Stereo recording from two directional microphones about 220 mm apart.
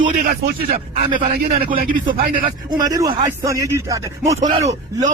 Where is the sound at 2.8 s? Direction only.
15° right (ahead or behind).